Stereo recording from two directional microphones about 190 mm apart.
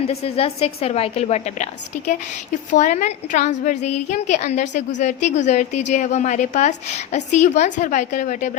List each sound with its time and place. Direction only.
0.1 s a woman's voice: 30° left (ahead or behind)
2.6 s a woman's voice: 40° left (ahead or behind)